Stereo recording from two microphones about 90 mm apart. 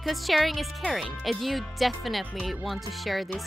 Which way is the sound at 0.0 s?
Centre (ahead or behind).